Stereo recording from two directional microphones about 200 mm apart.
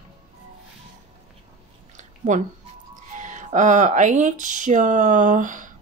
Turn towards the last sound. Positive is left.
turn(degrees=-40)  # may be behind; listen again after turning